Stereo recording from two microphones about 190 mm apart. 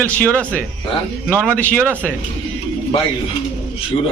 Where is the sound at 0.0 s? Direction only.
5° left (ahead or behind).